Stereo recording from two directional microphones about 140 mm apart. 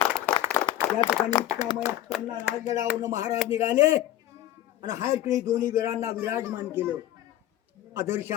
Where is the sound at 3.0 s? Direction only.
25° right (ahead or behind).